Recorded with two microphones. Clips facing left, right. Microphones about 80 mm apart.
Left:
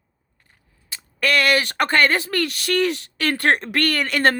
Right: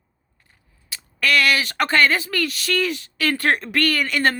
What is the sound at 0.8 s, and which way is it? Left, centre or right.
Speech, left.